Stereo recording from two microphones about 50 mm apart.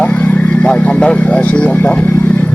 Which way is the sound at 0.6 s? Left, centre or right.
Left.